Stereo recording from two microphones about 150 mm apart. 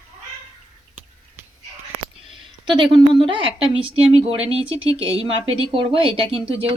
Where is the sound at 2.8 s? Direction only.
35° right (ahead or behind).